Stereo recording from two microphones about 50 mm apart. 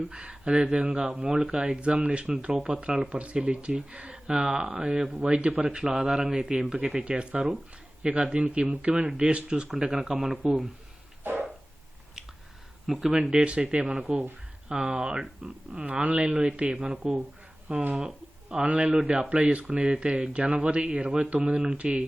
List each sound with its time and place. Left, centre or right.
0.1 s speech: centre
5.6 s speech: centre
11.2 s a sound: right
12.9 s speech: centre
13.3 s speech: centre